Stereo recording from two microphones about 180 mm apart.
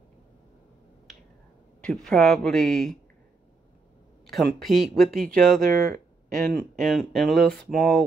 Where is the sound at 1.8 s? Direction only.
Centre (ahead or behind).